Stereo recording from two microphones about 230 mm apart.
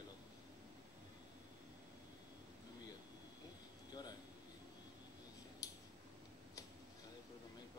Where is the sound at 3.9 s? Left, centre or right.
Centre.